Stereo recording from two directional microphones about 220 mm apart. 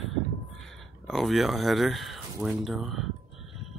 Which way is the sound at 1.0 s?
Centre (ahead or behind).